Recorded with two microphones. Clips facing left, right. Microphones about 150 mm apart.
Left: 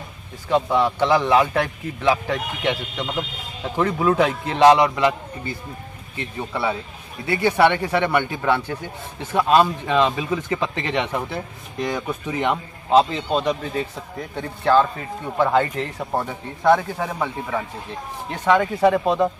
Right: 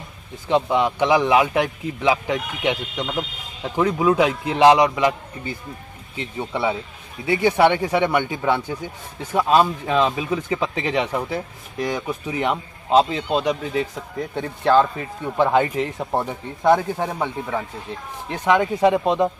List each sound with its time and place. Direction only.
0.5 s speech: 20° right (ahead or behind)